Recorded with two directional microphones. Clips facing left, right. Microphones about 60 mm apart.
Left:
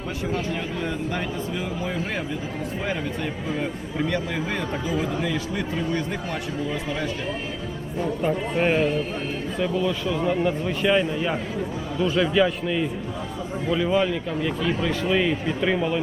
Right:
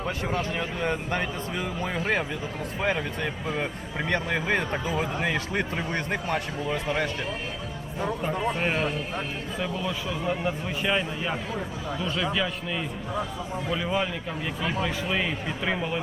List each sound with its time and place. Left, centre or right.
0.5 s a man's voice: right
4.1 s a man's voice: right
8.4 s a man's voice: centre
9.6 s a man's voice: centre